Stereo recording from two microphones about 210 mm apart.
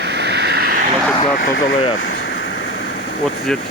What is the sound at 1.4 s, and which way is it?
Speech, 45° left (ahead or behind).